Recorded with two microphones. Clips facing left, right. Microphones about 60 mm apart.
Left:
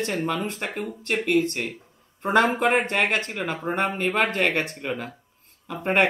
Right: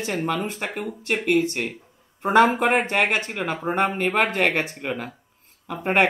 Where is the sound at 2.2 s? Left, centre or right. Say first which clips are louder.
Right 3 dB; centre.